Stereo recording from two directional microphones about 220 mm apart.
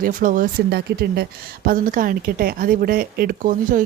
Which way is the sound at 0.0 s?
35° right (ahead or behind).